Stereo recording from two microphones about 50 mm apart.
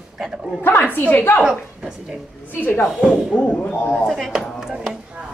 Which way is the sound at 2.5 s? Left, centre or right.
Left.